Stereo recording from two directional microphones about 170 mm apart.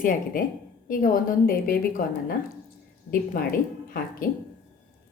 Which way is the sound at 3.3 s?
55° left (ahead or behind).